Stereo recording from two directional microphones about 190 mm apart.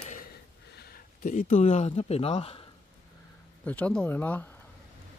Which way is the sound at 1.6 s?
35° left (ahead or behind).